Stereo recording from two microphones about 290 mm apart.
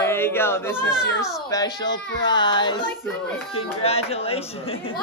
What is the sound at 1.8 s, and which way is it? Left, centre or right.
Speech, left.